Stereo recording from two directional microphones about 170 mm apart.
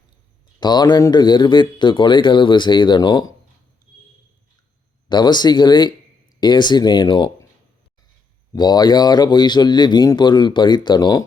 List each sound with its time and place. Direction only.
0.6 s speech: 25° left (ahead or behind)
5.0 s speech: 25° left (ahead or behind)
8.5 s speech: 25° left (ahead or behind)